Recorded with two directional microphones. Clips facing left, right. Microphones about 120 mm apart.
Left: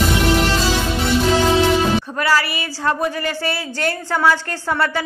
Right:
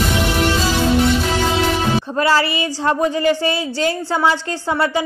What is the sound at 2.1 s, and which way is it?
A woman's voice, 25° right (ahead or behind).